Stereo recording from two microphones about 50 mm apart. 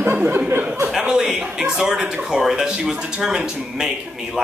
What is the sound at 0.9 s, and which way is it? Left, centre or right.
Speech, centre.